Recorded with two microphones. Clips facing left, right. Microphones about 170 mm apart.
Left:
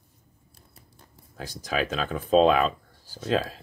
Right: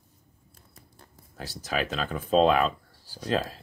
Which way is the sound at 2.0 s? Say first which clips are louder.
Left 3 dB; 15° left (ahead or behind).